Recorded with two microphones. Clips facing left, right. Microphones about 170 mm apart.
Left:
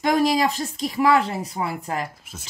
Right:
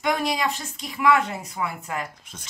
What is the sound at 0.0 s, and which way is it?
Speech, 35° left (ahead or behind).